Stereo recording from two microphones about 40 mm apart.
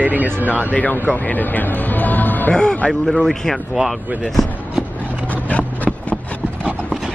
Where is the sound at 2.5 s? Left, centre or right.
Centre.